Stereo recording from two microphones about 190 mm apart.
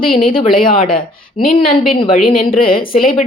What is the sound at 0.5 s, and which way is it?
Speech, 45° left (ahead or behind).